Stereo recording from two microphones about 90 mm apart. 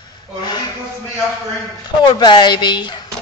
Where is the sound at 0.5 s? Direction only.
50° left (ahead or behind).